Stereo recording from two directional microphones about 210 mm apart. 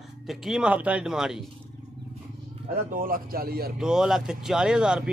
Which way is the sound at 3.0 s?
40° right (ahead or behind).